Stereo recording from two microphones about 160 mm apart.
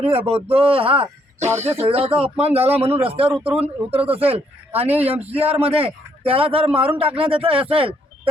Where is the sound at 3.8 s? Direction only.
40° right (ahead or behind).